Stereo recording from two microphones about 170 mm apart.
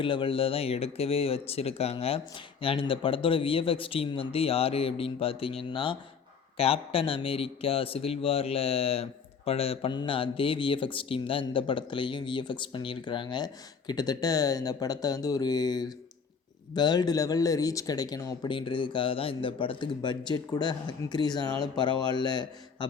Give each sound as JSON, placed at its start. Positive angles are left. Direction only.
{"t": 0.0, "sound": "speech", "side_deg": 30}